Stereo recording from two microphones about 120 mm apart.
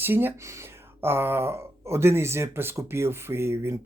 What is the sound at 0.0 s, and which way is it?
Speech, 15° right (ahead or behind).